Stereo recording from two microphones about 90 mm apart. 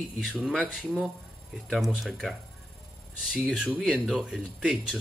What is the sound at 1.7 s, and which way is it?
Speech, centre (ahead or behind).